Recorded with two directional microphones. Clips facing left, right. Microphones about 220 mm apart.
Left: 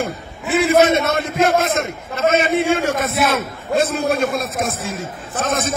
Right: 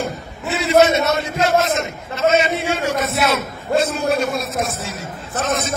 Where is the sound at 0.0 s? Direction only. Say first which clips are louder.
Left 1 dB; 50° left (ahead or behind).